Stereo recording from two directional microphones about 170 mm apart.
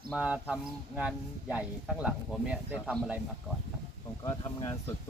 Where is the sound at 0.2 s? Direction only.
5° right (ahead or behind).